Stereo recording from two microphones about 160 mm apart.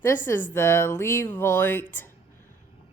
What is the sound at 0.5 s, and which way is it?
Speech, 15° left (ahead or behind).